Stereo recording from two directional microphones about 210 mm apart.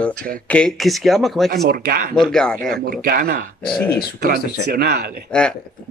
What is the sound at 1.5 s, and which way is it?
Speech, 45° right (ahead or behind).